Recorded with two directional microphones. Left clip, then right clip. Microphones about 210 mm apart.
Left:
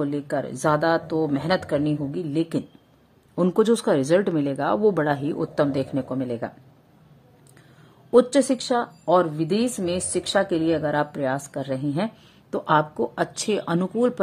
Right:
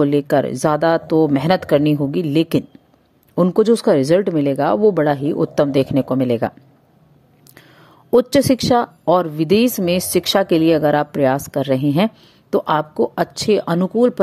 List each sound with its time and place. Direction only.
0.0 s speech: 30° right (ahead or behind)
3.4 s speech: 20° right (ahead or behind)
8.1 s speech: 30° right (ahead or behind)